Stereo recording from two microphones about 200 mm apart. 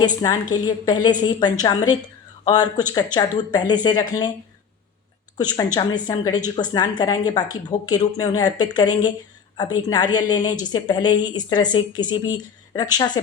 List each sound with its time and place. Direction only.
0.2 s a woman's voice: 20° left (ahead or behind)
5.4 s a woman's voice: 20° left (ahead or behind)